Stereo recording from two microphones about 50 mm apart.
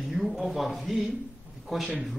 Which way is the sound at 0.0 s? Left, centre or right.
Centre.